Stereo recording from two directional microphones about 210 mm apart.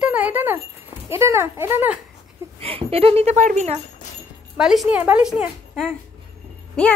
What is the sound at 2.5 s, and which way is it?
A woman's voice, 25° right (ahead or behind).